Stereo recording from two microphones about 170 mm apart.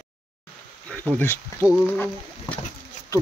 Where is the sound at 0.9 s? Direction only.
10° left (ahead or behind).